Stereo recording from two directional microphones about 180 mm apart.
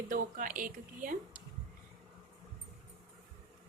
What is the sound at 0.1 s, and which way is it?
Speech, 50° right (ahead or behind).